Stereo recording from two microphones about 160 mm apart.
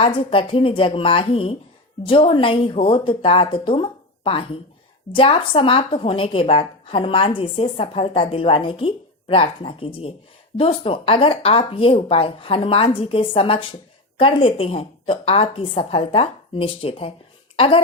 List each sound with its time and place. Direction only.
0.0 s a woman's voice: 35° left (ahead or behind)